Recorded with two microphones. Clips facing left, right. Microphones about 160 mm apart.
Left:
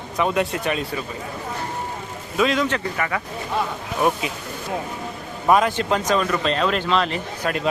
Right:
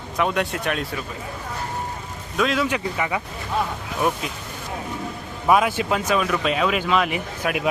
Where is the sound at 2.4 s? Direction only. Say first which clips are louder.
Left 1 dB; centre (ahead or behind).